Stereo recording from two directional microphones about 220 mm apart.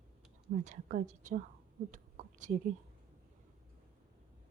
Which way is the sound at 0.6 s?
35° right (ahead or behind).